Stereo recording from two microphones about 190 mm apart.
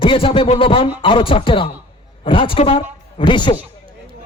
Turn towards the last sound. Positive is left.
turn(degrees=25)  # may be behind; listen again after turning